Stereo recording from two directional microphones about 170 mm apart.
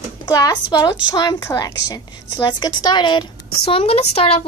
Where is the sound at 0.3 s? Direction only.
20° left (ahead or behind).